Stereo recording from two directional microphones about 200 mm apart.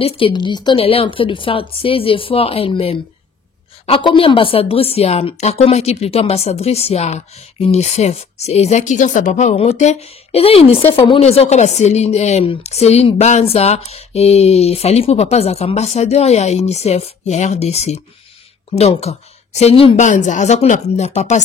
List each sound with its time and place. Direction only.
0.0 s a woman's voice: 25° left (ahead or behind)